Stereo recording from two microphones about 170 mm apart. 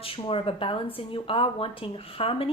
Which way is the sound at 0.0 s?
35° left (ahead or behind).